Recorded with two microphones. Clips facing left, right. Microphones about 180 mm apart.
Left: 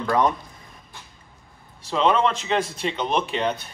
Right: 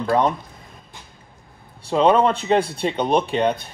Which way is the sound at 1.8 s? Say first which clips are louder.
Right 4 dB; 35° right (ahead or behind).